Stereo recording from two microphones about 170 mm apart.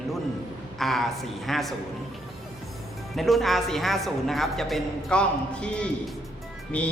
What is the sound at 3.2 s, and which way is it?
A man's voice, centre (ahead or behind).